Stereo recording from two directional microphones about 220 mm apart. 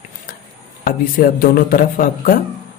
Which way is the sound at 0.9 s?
40° left (ahead or behind).